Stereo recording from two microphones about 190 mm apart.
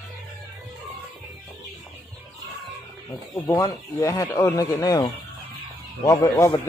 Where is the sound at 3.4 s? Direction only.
15° left (ahead or behind).